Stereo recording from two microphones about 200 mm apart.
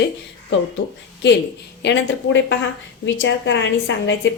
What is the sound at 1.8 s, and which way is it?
A woman's voice, 65° left (ahead or behind).